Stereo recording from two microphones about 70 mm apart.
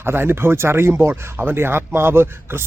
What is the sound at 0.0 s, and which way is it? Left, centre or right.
Speech, right.